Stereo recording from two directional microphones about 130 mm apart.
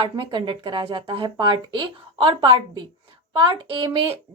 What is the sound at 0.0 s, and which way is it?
Speech, 40° right (ahead or behind).